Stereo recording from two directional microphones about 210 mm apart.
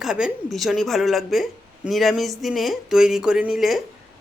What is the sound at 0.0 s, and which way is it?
Speech, centre (ahead or behind).